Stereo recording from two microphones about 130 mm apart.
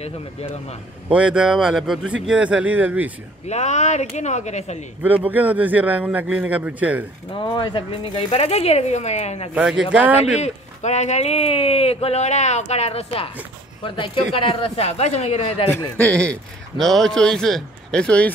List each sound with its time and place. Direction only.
0.0 s speech: 55° left (ahead or behind)
1.0 s speech: 10° right (ahead or behind)
3.4 s speech: 60° left (ahead or behind)
5.0 s speech: 15° right (ahead or behind)
7.3 s speech: 40° left (ahead or behind); by 9.5 s 60° left (ahead or behind)
9.5 s speech: 5° right (ahead or behind)
10.2 s speech: 60° left (ahead or behind)
15.7 s a man's voice: 10° left (ahead or behind)